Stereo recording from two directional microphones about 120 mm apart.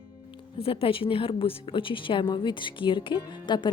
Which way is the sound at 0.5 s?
50° left (ahead or behind).